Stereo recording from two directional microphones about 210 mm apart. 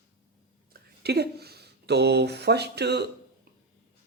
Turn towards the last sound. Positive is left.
turn(degrees=-50)  # may be behind; listen again after turning